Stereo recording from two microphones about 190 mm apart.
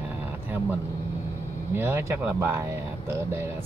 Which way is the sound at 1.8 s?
15° right (ahead or behind).